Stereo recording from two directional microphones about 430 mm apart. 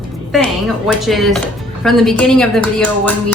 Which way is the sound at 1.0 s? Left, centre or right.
Centre.